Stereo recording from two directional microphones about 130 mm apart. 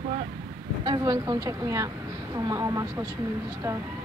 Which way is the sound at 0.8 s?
30° right (ahead or behind).